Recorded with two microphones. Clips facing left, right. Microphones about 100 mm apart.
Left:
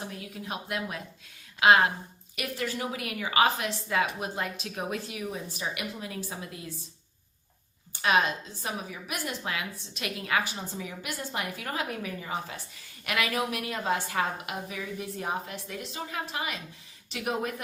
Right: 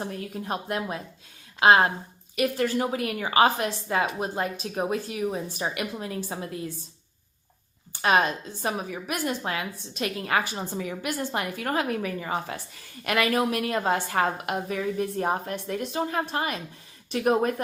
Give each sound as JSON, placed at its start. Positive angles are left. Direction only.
{"t": 0.0, "sound": "a woman's voice", "side_deg": -45}
{"t": 8.6, "sound": "a woman's voice", "side_deg": -45}
{"t": 10.8, "sound": "a woman's voice", "side_deg": -55}